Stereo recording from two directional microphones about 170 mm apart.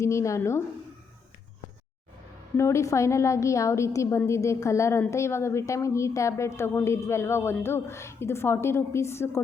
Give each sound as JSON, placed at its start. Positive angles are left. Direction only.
{"t": 0.0, "sound": "a woman's voice", "side_deg": 15}
{"t": 2.6, "sound": "a woman's voice", "side_deg": 15}